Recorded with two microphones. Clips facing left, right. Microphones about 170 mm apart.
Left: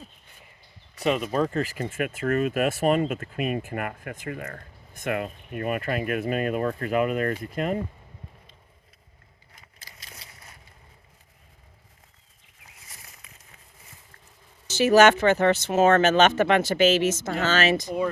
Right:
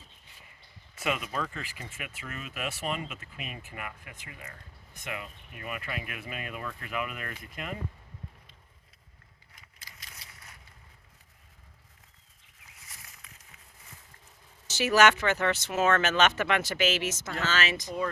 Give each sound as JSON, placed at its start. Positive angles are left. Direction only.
{"t": 0.9, "sound": "speech", "side_deg": 35}
{"t": 9.6, "sound": "a sound", "side_deg": 30}
{"t": 14.7, "sound": "speech", "side_deg": 25}